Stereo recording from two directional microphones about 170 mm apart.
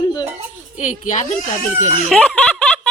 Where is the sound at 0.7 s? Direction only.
45° left (ahead or behind).